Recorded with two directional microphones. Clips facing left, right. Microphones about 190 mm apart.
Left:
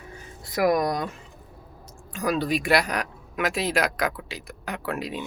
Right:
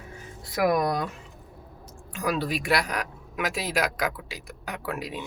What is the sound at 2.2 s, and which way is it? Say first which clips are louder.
Speech: left 3 dB; 5° right (ahead or behind).